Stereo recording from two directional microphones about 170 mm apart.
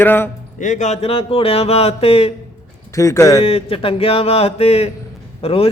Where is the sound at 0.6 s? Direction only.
45° left (ahead or behind).